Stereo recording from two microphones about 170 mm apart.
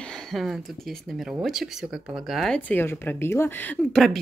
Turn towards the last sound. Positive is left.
turn(degrees=0)  # may be behind; listen again after turning